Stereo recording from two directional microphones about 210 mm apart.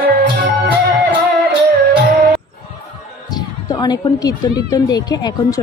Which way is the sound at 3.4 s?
20° left (ahead or behind).